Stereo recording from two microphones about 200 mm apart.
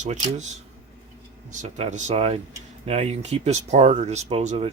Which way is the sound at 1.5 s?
35° right (ahead or behind).